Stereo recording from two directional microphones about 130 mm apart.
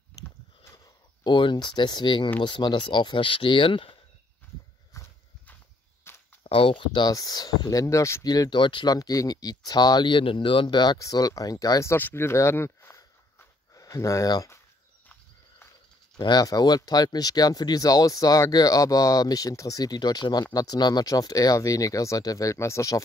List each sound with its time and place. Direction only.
1.2 s speech: 35° left (ahead or behind)
4.9 s horse: 25° left (ahead or behind)
6.0 s a sound: 20° left (ahead or behind)
6.4 s speech: 45° left (ahead or behind); by 14.6 s 25° left (ahead or behind)
16.2 s speech: 30° left (ahead or behind)